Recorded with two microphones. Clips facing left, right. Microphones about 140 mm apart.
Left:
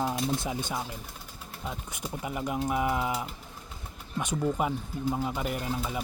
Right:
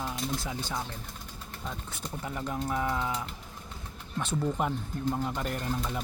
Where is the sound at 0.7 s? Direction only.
5° left (ahead or behind).